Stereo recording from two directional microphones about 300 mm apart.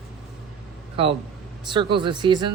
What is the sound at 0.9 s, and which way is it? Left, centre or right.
A man's voice, centre.